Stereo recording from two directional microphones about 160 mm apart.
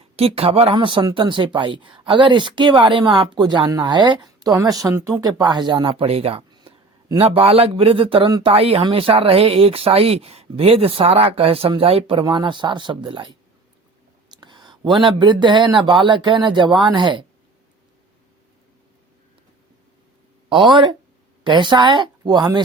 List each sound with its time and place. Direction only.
0.2 s speech: 40° right (ahead or behind)
8.5 s speech: 35° right (ahead or behind)
14.4 s a sound: 30° right (ahead or behind)
14.9 s speech: 30° right (ahead or behind)
20.5 s speech: 30° right (ahead or behind)